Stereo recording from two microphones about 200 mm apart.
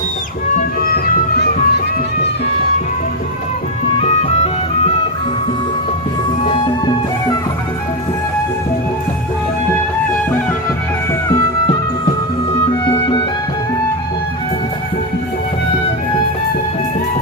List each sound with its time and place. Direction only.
0.5 s music: 50° left (ahead or behind)
4.0 s music: 35° left (ahead or behind)
6.5 s music: 20° left (ahead or behind)
12.7 s music: 25° left (ahead or behind)